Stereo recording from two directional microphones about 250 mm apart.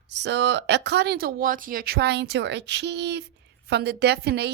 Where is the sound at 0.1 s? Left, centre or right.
Right.